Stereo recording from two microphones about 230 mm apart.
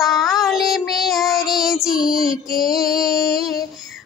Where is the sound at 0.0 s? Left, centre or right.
Centre.